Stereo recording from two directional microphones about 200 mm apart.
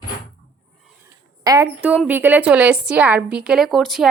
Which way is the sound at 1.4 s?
20° right (ahead or behind).